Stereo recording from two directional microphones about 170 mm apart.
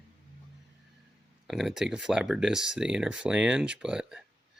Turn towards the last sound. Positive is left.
turn(degrees=-5)  # may be behind; listen again after turning